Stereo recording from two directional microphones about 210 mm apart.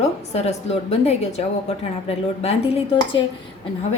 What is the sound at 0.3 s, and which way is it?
A woman's voice, 30° left (ahead or behind).